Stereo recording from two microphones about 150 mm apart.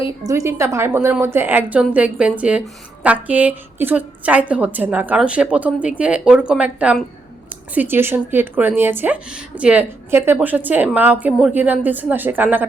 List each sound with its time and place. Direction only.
0.2 s speech: 20° right (ahead or behind)